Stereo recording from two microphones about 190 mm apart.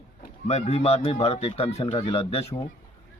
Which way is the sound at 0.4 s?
35° left (ahead or behind).